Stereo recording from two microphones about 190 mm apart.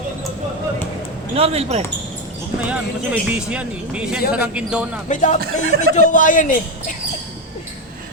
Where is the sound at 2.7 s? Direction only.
5° right (ahead or behind).